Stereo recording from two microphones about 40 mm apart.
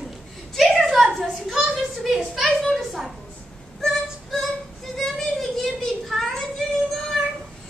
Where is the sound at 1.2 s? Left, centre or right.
Centre.